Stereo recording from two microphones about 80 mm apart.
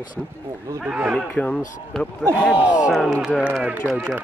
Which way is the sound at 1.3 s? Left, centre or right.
Centre.